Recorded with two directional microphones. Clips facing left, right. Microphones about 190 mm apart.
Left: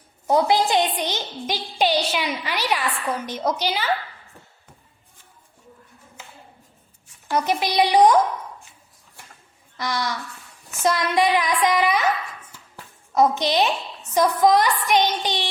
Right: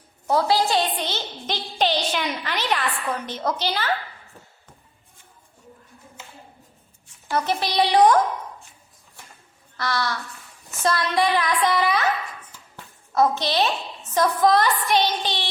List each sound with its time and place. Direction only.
0.3 s a woman's voice: 20° left (ahead or behind)
7.3 s a woman's voice: 15° left (ahead or behind)
9.7 s a woman's voice: 15° left (ahead or behind)
12.5 s a sound: 15° left (ahead or behind)
14.1 s a woman's voice: 15° left (ahead or behind)